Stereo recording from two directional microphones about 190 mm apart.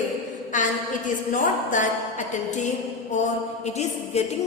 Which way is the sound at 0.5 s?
40° left (ahead or behind).